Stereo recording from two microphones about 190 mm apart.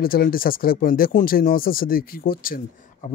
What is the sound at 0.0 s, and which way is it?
Speech, 50° left (ahead or behind).